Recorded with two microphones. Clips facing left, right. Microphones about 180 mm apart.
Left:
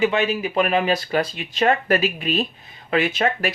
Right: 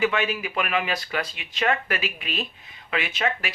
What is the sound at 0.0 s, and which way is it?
Speech, 25° left (ahead or behind).